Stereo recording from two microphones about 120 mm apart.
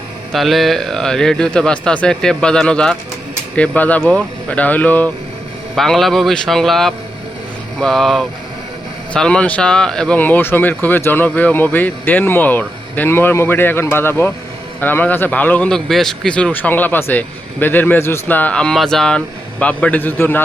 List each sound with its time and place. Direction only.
0.3 s a man's voice: centre (ahead or behind)
5.7 s a man's voice: 5° left (ahead or behind)